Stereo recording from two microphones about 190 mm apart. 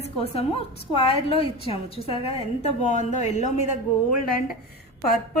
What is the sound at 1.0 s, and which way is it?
A woman's voice, 30° left (ahead or behind).